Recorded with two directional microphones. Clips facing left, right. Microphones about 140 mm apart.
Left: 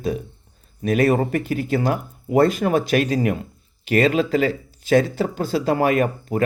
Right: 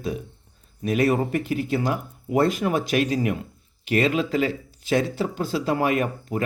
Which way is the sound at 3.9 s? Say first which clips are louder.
Left 4 dB; 35° left (ahead or behind).